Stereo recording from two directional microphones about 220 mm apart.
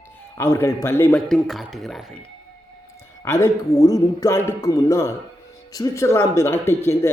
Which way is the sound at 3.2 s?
10° left (ahead or behind).